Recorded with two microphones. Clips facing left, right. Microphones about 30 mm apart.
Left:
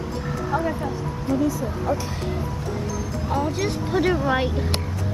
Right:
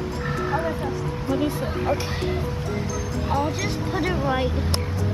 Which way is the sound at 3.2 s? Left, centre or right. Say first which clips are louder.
Even; centre.